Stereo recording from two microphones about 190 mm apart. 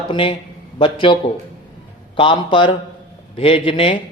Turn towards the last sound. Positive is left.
turn(degrees=30)  # may be behind; listen again after turning